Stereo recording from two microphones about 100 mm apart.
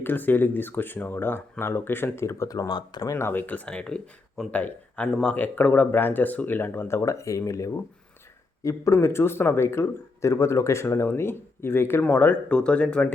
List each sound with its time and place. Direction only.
0.0 s speech: 20° left (ahead or behind); by 3.0 s 45° left (ahead or behind)
3.0 s speech: 30° left (ahead or behind); by 13.1 s 10° left (ahead or behind)